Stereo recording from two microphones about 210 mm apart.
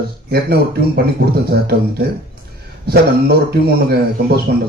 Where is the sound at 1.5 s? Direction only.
50° right (ahead or behind).